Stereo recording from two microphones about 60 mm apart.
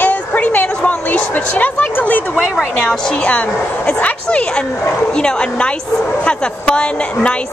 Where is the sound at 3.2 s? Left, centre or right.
Left.